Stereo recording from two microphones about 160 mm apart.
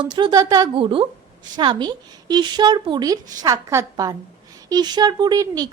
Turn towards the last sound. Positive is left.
turn(degrees=-25)  # may be behind; listen again after turning